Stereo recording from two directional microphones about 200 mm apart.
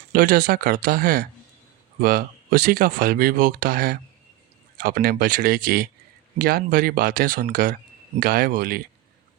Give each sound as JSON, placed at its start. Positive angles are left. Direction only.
{"t": 0.1, "sound": "speech", "side_deg": -45}